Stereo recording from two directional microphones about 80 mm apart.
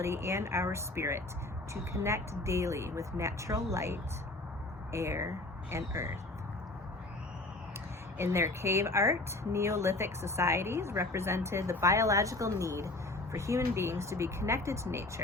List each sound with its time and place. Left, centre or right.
0.0 s speech: right
8.2 s speech: right